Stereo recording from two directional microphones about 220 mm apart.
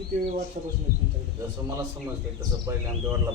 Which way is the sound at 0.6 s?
35° right (ahead or behind).